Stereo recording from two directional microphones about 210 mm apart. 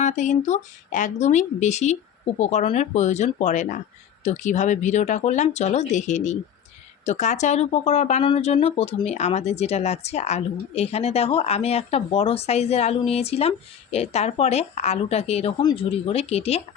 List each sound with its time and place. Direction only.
0.0 s speech: 35° left (ahead or behind)